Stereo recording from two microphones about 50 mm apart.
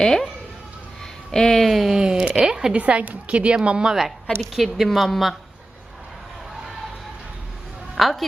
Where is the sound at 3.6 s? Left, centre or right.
Centre.